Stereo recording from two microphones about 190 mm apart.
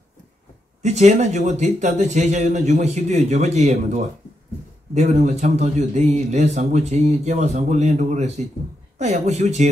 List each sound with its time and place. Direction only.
0.8 s a man's voice: 35° right (ahead or behind)